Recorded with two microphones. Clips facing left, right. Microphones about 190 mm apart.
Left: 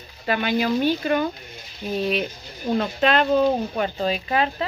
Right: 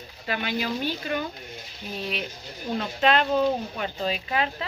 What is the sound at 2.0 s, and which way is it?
Speech, 45° left (ahead or behind).